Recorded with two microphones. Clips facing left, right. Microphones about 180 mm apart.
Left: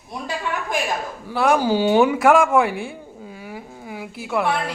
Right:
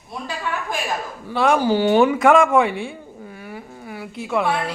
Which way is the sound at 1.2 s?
5° left (ahead or behind).